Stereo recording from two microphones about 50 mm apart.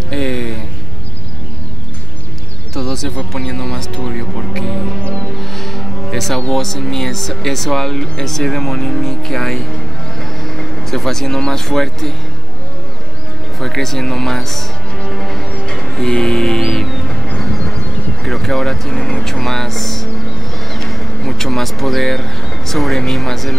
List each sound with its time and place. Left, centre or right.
0.1 s a sound: centre
2.7 s a sound: centre
3.3 s speech: centre
5.4 s music: centre
6.5 s speech: centre
13.6 s speech: centre
15.0 s music: centre
15.6 s music: left
15.9 s speech: centre
17.4 s vehicle: centre
18.2 s speech: centre